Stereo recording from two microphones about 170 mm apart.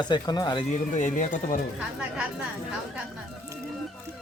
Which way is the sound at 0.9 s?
45° left (ahead or behind).